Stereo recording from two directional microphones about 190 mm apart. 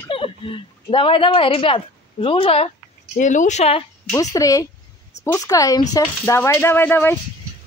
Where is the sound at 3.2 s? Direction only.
40° left (ahead or behind).